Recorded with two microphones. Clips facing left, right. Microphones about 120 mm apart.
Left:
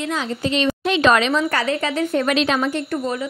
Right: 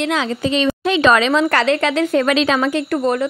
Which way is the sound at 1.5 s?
85° right.